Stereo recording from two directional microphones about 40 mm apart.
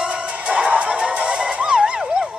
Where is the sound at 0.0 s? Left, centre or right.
Right.